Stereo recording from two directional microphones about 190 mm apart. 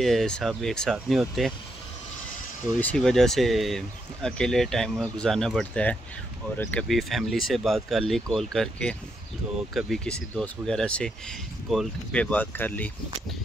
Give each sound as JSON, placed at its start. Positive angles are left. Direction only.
{"t": 0.0, "sound": "speech", "side_deg": 0}
{"t": 2.8, "sound": "speech", "side_deg": 5}